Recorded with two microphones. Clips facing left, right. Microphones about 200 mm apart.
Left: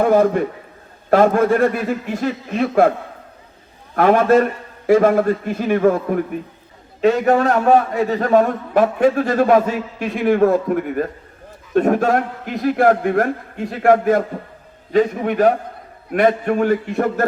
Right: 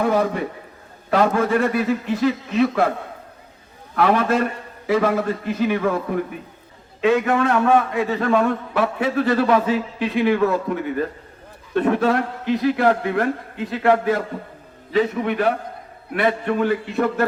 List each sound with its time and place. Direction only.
0.0 s a man's voice: 50° left (ahead or behind)
3.9 s a man's voice: 45° left (ahead or behind)
7.0 s a man's voice: 40° left (ahead or behind)